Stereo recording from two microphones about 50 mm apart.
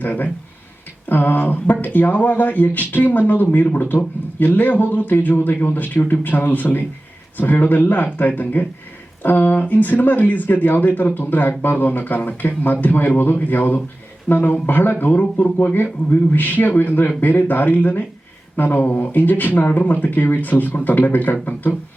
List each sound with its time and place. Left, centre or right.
0.0 s a man's voice: left